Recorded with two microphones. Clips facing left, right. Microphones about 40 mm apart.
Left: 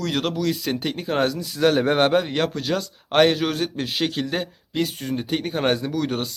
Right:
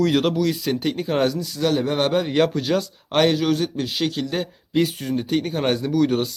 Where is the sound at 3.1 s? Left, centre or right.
Centre.